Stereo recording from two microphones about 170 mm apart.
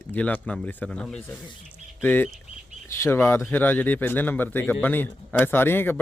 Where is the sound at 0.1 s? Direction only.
10° left (ahead or behind).